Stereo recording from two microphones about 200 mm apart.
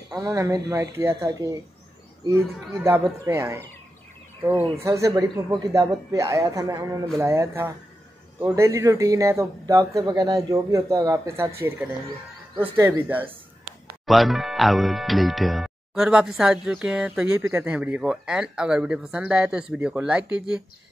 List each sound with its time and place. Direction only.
0.1 s speech: 15° right (ahead or behind)
4.8 s speech: 15° right (ahead or behind)
12.7 s speech: 10° right (ahead or behind)